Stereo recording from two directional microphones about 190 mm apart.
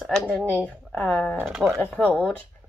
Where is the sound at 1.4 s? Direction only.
5° right (ahead or behind).